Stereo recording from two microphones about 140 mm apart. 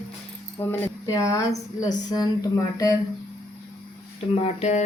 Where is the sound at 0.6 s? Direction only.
20° left (ahead or behind).